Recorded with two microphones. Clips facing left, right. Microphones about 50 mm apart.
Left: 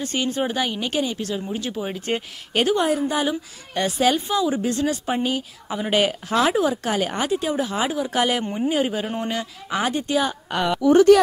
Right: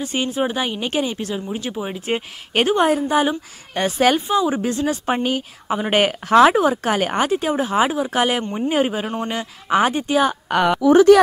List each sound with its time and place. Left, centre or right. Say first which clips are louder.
0.0 s speech: right 2 dB; centre
0.7 s speech: right 2 dB; right
2.5 s speech: right 3 dB; right
3.2 s speech: right 4 dB; right